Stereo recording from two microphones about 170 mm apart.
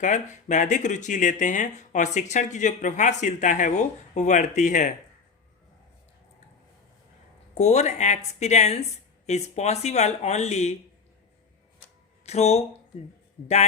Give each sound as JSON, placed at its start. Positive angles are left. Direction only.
{"t": 0.0, "sound": "speech", "side_deg": 45}
{"t": 7.5, "sound": "speech", "side_deg": 40}
{"t": 12.2, "sound": "speech", "side_deg": 40}